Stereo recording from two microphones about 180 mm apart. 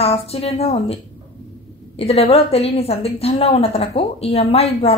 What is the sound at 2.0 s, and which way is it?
A woman's voice, 35° left (ahead or behind).